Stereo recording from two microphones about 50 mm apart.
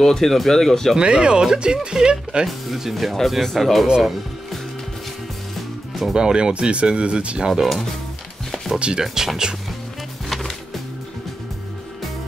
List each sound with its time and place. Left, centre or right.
0.0 s speech: centre
0.9 s speech: centre
2.4 s speech: centre
3.8 s speech: centre
6.1 s speech: centre
7.4 s speech: centre
8.7 s speech: right
9.0 s speech: centre
10.3 s music: centre